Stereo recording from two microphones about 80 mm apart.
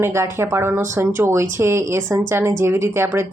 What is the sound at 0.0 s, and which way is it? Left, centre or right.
Speech, right.